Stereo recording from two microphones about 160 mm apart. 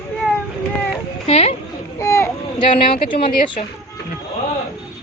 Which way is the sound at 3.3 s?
65° left (ahead or behind).